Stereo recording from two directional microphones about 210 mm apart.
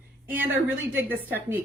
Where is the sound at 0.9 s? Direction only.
10° right (ahead or behind).